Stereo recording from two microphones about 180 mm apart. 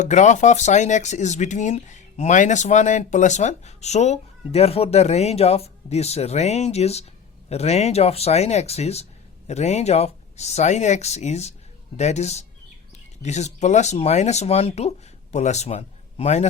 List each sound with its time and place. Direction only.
0.0 s speech: 40° left (ahead or behind)